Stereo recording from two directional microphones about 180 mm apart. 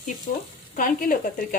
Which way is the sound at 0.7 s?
50° left (ahead or behind).